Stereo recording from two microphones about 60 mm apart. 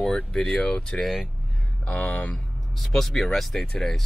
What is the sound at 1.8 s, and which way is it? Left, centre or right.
Speech, left.